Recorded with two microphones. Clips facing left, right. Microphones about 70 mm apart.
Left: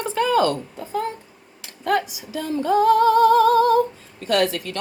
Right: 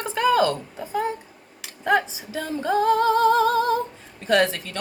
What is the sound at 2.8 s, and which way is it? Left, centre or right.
Speech, right.